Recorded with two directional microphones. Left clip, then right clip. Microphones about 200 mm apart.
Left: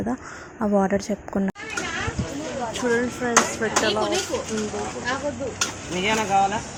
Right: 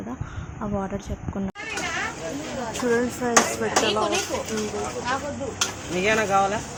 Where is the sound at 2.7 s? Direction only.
15° right (ahead or behind).